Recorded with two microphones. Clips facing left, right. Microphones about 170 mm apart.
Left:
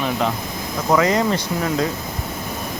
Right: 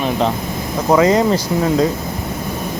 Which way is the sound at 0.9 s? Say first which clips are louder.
Right 5 dB; 30° right (ahead or behind).